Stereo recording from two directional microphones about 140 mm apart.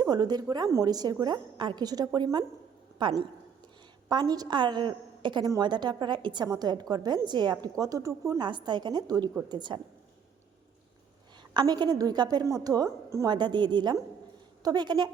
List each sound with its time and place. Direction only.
0.0 s a woman's voice: 30° right (ahead or behind)
11.5 s a woman's voice: 30° right (ahead or behind)